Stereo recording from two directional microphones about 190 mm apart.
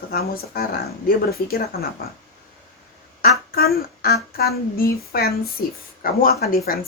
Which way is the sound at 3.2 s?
55° left (ahead or behind).